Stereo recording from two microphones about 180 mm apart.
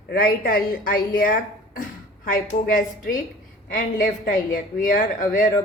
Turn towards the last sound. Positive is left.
turn(degrees=50)  # may be behind; listen again after turning